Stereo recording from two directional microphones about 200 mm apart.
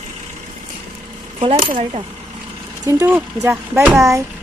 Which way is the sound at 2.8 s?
15° right (ahead or behind).